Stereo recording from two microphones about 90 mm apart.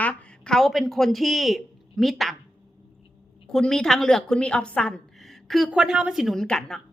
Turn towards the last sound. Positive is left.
turn(degrees=5)  # may be behind; listen again after turning